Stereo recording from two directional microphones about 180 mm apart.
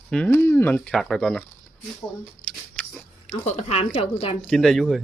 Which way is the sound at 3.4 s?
35° left (ahead or behind).